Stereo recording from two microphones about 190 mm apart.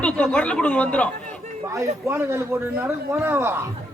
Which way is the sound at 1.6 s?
15° right (ahead or behind).